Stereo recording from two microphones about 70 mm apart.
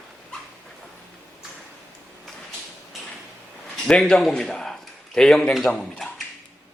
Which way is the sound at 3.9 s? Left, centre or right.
Centre.